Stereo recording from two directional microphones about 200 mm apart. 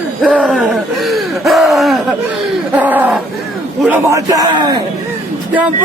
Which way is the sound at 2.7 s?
10° right (ahead or behind).